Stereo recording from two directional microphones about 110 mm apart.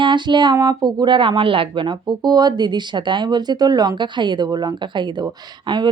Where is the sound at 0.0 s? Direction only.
45° right (ahead or behind).